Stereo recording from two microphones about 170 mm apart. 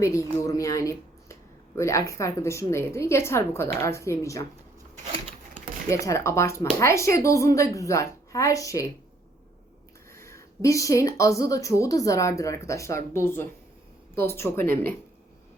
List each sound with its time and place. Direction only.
0.0 s speech: 20° left (ahead or behind)
5.9 s speech: 20° left (ahead or behind)
10.1 s speech: 15° left (ahead or behind)